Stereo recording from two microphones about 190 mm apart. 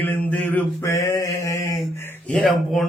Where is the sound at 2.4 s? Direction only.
Centre (ahead or behind).